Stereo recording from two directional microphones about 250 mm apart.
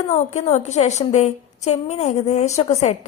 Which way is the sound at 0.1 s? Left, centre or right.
Left.